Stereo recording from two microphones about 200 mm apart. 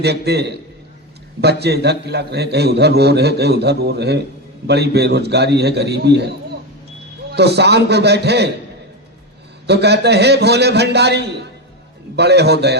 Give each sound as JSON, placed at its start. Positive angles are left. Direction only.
{"t": 0.0, "sound": "a man's voice", "side_deg": -55}
{"t": 7.3, "sound": "a man's voice", "side_deg": -55}
{"t": 9.6, "sound": "a man's voice", "side_deg": -55}